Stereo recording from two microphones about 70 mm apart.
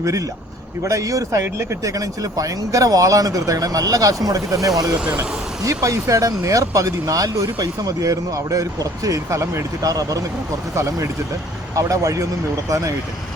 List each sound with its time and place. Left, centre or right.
0.0 s speech: right
9.9 s speech: right
10.8 s speech: right